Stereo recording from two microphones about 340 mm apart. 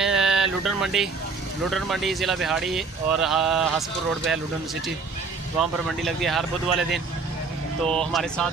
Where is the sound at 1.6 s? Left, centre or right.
Centre.